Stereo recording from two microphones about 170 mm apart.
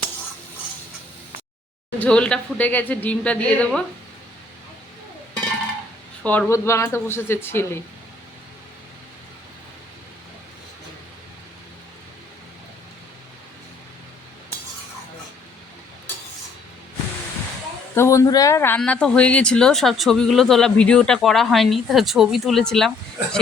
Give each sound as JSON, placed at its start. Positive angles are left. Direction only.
{"t": 2.0, "sound": "a woman's voice", "side_deg": 5}
{"t": 6.2, "sound": "a woman's voice", "side_deg": 10}
{"t": 17.9, "sound": "a woman's voice", "side_deg": 15}
{"t": 18.8, "sound": "speech", "side_deg": 5}